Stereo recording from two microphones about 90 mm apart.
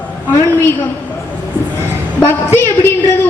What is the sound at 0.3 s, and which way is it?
Speech, 30° left (ahead or behind).